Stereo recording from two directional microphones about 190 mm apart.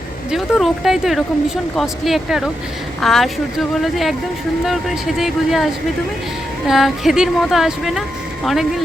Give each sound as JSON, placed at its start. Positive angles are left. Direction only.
{"t": 0.3, "sound": "speech", "side_deg": 0}